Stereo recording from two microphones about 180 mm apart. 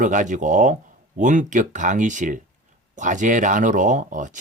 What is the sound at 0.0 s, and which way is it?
Speech, 45° right (ahead or behind).